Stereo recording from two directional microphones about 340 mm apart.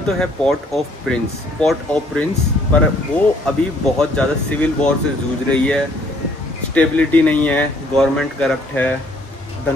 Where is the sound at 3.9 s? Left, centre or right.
Centre.